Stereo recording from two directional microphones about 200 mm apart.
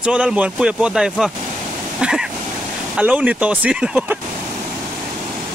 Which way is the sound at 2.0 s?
5° right (ahead or behind).